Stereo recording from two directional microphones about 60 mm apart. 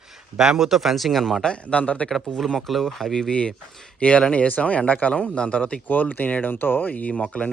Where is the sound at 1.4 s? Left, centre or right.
Centre.